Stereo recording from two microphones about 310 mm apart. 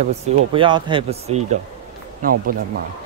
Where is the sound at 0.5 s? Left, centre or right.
Centre.